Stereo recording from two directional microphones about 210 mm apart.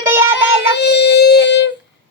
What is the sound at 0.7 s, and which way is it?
Child singing, 55° left (ahead or behind).